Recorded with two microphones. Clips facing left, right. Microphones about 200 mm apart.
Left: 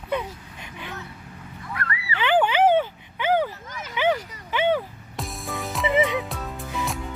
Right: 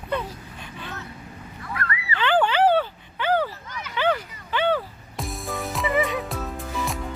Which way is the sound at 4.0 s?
15° left (ahead or behind).